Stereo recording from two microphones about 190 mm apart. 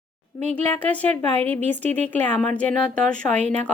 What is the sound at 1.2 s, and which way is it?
Speech, 30° right (ahead or behind).